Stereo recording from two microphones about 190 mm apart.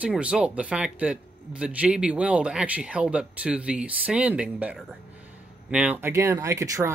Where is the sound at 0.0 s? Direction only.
5° right (ahead or behind).